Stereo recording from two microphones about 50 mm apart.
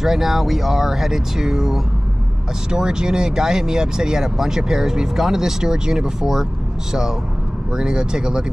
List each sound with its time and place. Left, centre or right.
0.0 s speech: centre